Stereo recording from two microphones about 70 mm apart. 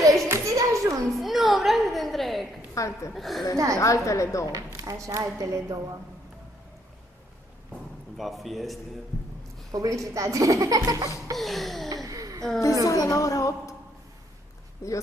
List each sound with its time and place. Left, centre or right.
0.0 s clapping: right
1.0 s a sound: centre
2.7 s a woman's voice: left
3.2 s music: centre
3.8 s a woman's voice: left
4.5 s speech: right
8.2 s music: centre
9.7 s speech: right
11.3 s music: centre
11.9 s speech: right
12.8 s a woman's voice: left
14.8 s a woman's voice: left